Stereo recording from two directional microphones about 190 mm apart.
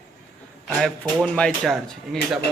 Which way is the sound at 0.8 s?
5° left (ahead or behind).